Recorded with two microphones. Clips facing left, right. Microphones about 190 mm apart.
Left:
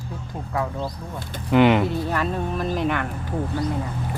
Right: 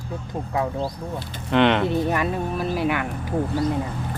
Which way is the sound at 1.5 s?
5° left (ahead or behind).